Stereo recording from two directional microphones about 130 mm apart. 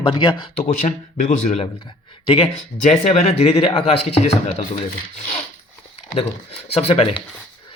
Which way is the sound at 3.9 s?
55° left (ahead or behind).